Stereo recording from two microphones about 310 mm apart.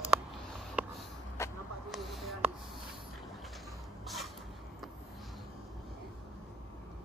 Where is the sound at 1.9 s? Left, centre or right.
Centre.